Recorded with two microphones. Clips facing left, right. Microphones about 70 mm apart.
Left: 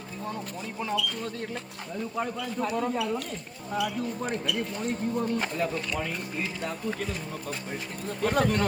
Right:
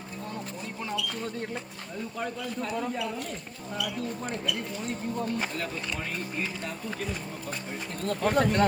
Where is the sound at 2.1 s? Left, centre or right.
Left.